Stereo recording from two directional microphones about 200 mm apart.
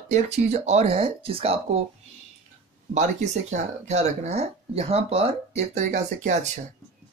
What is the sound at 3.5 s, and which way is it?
Speech, 35° right (ahead or behind).